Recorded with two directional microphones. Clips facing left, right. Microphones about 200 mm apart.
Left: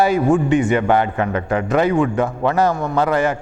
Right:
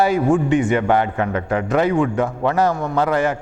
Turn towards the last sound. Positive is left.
turn(degrees=15)  # may be behind; listen again after turning